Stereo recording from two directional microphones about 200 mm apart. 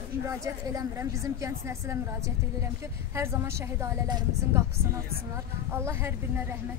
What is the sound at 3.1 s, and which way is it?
A woman's voice, 15° right (ahead or behind).